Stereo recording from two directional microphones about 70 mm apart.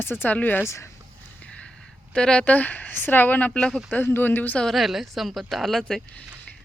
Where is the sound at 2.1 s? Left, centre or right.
Centre.